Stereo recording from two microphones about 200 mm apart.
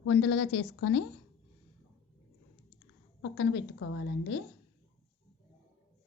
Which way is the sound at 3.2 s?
60° left (ahead or behind).